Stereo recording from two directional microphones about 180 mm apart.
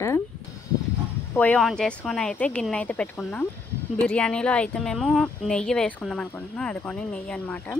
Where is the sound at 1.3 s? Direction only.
5° left (ahead or behind).